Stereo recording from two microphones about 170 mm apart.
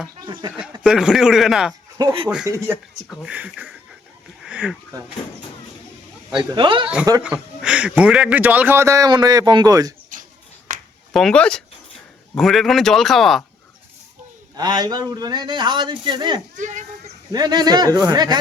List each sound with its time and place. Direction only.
0.2 s speech: 25° right (ahead or behind)
0.8 s speech: 5° right (ahead or behind)
2.0 s a man's voice: 25° right (ahead or behind)
3.1 s a man's voice: 5° right (ahead or behind)
4.4 s a sound: 5° right (ahead or behind)
6.3 s a man's voice: 30° right (ahead or behind)
7.2 s a man's voice: 5° right (ahead or behind)
10.1 s a sound: 50° right (ahead or behind)
11.1 s speech: 5° left (ahead or behind)
14.5 s a man's voice: 25° right (ahead or behind)
16.6 s speech: 45° right (ahead or behind)
17.3 s a man's voice: 25° right (ahead or behind)